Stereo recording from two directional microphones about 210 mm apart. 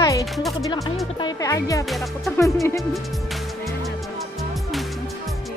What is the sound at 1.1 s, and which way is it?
Speech, 20° left (ahead or behind).